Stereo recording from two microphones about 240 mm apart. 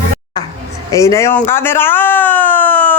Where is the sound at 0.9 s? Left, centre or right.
Centre.